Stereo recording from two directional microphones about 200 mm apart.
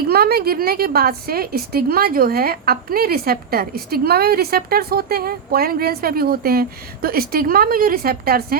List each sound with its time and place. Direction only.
0.1 s a woman's voice: 50° right (ahead or behind)